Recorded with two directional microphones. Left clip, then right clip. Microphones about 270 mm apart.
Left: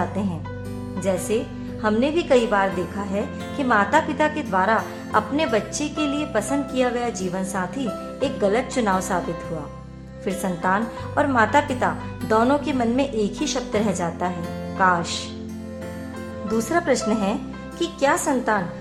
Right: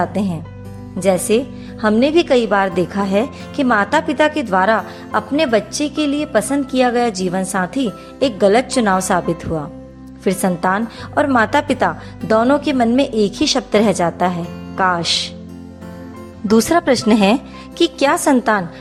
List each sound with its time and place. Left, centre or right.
0.9 s a woman's voice: right
10.2 s a woman's voice: right
16.5 s a woman's voice: right